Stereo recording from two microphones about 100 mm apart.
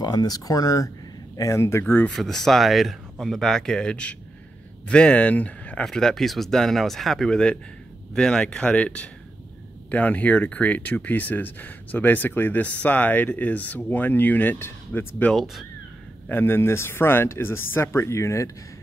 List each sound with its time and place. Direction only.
0.0 s speech: 40° left (ahead or behind); by 2.0 s 25° left (ahead or behind)
2.0 s speech: 5° left (ahead or behind)
15.3 s speech: centre (ahead or behind)
16.3 s speech: 20° left (ahead or behind)